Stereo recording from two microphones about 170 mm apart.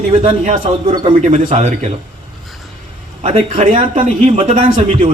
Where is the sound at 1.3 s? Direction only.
45° right (ahead or behind).